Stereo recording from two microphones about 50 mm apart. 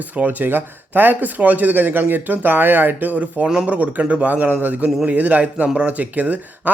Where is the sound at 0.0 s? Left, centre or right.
Right.